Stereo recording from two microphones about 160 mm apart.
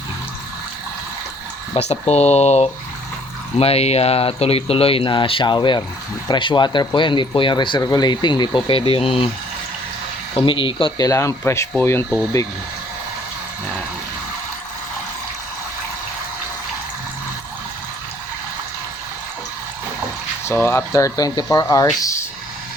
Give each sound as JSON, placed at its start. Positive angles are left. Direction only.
{"t": 1.7, "sound": "speech", "side_deg": 40}
{"t": 10.3, "sound": "speech", "side_deg": 30}
{"t": 20.5, "sound": "speech", "side_deg": 15}